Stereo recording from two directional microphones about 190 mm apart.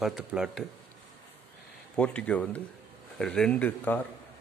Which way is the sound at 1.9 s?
5° left (ahead or behind).